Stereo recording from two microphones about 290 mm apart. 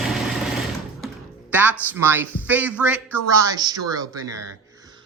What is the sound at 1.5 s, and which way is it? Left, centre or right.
Speech, centre.